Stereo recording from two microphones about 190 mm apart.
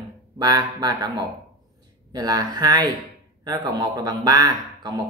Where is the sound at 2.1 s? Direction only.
20° right (ahead or behind).